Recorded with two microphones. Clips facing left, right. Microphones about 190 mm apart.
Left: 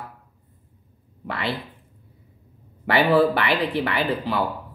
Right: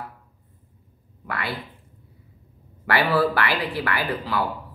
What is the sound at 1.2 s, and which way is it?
Speech, 25° left (ahead or behind).